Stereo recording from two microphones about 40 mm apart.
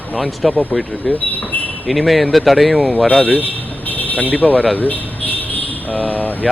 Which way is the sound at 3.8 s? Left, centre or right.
Left.